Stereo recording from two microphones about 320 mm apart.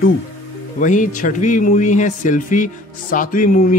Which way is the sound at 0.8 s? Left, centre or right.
Left.